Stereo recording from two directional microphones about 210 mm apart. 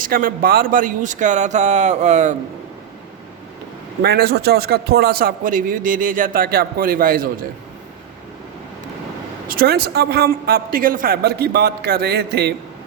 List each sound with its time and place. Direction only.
0.0 s a man's voice: 40° right (ahead or behind)
4.0 s a man's voice: 50° right (ahead or behind)
9.5 s a man's voice: 45° right (ahead or behind)